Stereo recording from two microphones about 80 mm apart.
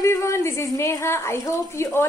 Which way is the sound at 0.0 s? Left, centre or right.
Left.